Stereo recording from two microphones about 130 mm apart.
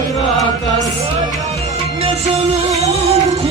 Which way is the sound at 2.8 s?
55° right (ahead or behind).